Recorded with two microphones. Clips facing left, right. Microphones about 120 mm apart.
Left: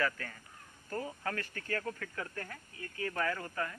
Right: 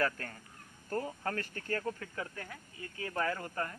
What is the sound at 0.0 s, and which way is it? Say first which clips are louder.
Speech: right 1 dB; 40° right (ahead or behind).